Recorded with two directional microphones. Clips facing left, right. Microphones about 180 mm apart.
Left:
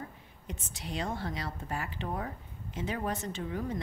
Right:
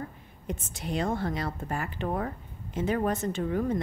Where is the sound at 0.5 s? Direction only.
50° right (ahead or behind).